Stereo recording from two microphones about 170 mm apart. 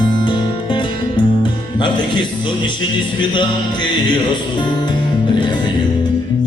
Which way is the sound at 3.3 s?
25° left (ahead or behind).